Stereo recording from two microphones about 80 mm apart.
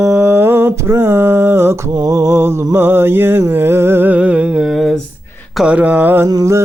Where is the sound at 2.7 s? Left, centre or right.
Right; by 5.0 s centre.